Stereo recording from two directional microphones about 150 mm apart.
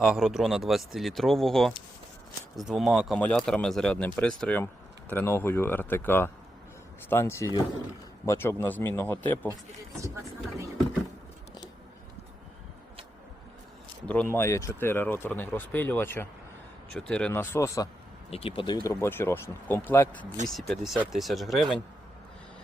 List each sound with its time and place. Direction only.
0.0 s speech: centre (ahead or behind)
14.1 s speech: 10° left (ahead or behind)
18.3 s speech: 40° left (ahead or behind); by 20.2 s 15° left (ahead or behind)
20.5 s speech: centre (ahead or behind)